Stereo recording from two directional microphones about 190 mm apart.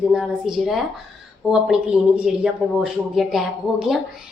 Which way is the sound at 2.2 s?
5° right (ahead or behind).